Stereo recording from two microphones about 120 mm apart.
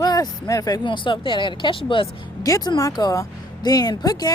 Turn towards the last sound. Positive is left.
turn(degrees=30)  # may be behind; listen again after turning